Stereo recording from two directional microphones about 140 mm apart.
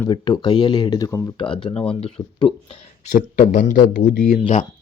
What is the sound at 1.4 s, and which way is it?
Speech, 40° left (ahead or behind).